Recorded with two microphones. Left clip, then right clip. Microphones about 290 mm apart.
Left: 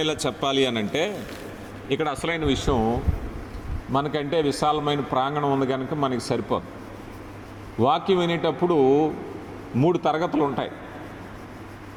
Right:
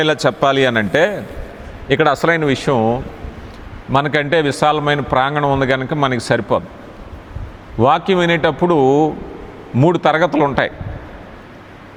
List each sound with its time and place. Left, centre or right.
0.0 s a man's voice: right
1.9 s a man's voice: right
2.2 s a man's voice: right
7.8 s a man's voice: right